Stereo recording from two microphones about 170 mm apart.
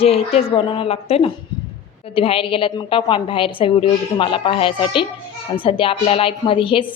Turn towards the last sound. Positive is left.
turn(degrees=30)  # may be behind; listen again after turning